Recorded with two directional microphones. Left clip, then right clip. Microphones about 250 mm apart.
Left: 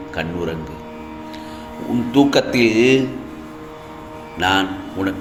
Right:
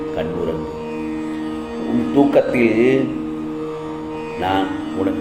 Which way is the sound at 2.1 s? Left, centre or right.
Left.